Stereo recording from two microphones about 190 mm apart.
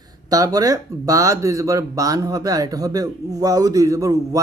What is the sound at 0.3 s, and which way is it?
Speech, 20° right (ahead or behind).